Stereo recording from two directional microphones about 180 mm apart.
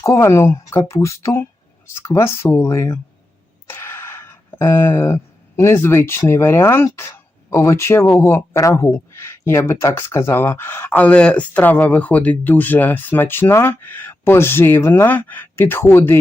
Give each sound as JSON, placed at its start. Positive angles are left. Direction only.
{"t": 0.0, "sound": "a man's voice", "side_deg": 15}